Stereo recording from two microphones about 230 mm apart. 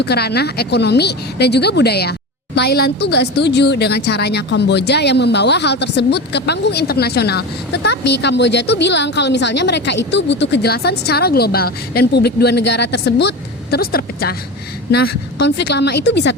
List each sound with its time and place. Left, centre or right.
0.0 s speech: left